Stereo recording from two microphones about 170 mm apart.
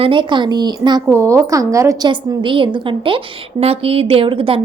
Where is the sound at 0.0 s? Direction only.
30° right (ahead or behind).